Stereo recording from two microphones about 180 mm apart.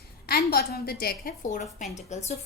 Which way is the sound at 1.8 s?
40° left (ahead or behind).